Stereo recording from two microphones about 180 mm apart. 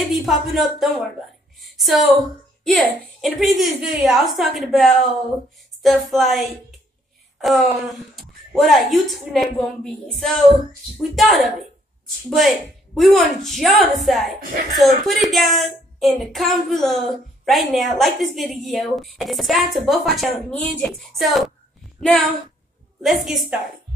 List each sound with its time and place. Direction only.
0.0 s a woman's voice: centre (ahead or behind)